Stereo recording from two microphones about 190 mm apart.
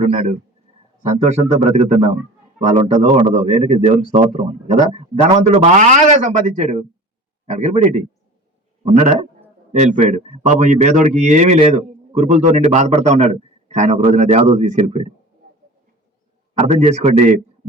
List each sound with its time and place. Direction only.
0.0 s a man's voice: 35° right (ahead or behind)
16.6 s a man's voice: 35° right (ahead or behind)